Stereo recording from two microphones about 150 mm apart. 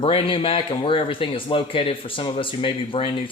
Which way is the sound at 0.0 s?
35° left (ahead or behind).